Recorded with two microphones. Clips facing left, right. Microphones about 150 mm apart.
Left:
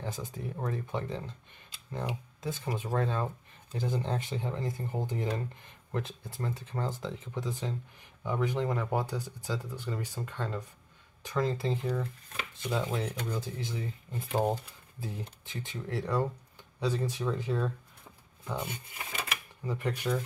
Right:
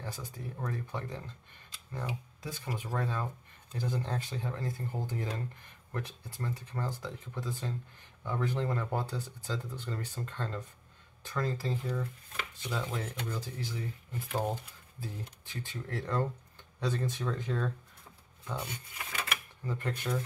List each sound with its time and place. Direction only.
0.0 s speech: 20° left (ahead or behind)
2.4 s speech: 20° left (ahead or behind)
15.0 s speech: 20° left (ahead or behind)
18.4 s speech: 25° left (ahead or behind)
19.6 s speech: 10° left (ahead or behind)